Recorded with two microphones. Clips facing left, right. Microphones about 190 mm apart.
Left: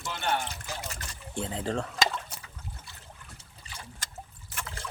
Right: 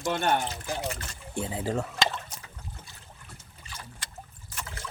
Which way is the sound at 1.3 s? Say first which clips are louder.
Right 1 dB; 10° right (ahead or behind).